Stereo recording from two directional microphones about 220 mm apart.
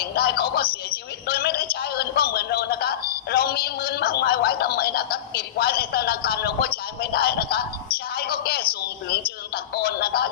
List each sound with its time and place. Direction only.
0.0 s a woman's voice: 45° left (ahead or behind)
8.1 s a sound: 45° left (ahead or behind)
9.7 s music: 45° left (ahead or behind)